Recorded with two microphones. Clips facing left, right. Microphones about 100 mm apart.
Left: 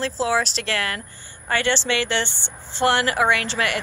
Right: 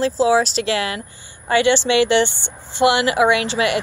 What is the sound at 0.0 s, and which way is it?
Speech, 10° right (ahead or behind).